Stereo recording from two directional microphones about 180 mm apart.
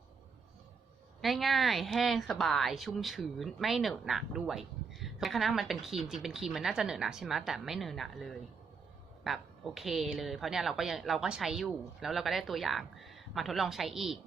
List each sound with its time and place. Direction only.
1.2 s speech: centre (ahead or behind)